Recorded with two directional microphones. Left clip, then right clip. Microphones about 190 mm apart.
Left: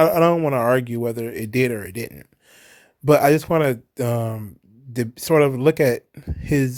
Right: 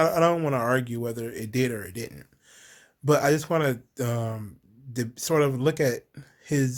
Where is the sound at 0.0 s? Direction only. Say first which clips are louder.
Left 6 dB; 35° left (ahead or behind).